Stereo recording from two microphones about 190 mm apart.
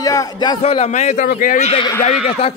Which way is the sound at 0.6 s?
35° left (ahead or behind).